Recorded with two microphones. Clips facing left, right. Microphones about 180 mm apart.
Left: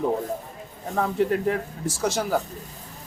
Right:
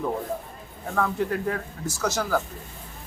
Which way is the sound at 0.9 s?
25° left (ahead or behind).